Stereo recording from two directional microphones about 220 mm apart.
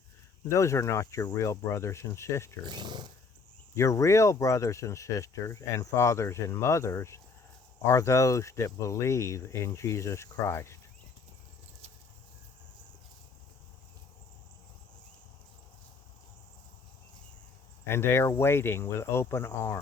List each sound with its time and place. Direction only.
0.4 s speech: 15° left (ahead or behind)
2.6 s speech: 20° right (ahead or behind)
3.8 s speech: 15° left (ahead or behind)
17.8 s speech: 10° left (ahead or behind)